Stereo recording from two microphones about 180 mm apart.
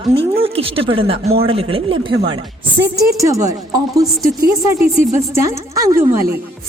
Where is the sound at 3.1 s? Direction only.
15° right (ahead or behind).